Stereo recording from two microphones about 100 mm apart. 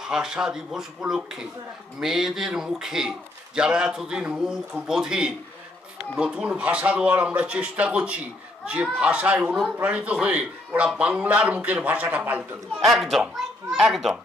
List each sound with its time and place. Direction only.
0.0 s a man's voice: 5° right (ahead or behind)
12.8 s a child's voice: centre (ahead or behind)